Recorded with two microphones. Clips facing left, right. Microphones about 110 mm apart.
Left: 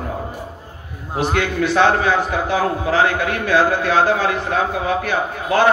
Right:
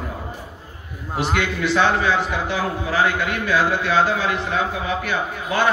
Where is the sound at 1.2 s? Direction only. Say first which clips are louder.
Left 3 dB; 45° left (ahead or behind).